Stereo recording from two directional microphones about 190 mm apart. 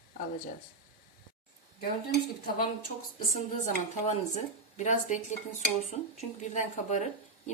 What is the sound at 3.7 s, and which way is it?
Speech, 40° left (ahead or behind).